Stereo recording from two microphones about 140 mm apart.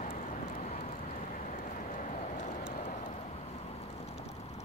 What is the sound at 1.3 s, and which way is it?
Vehicle, 65° left (ahead or behind).